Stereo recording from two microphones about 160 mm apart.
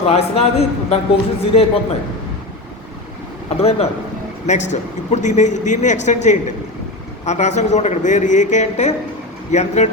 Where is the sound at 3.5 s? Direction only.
40° left (ahead or behind).